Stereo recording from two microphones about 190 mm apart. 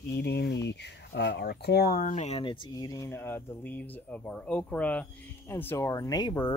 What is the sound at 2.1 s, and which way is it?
Speech, 35° left (ahead or behind).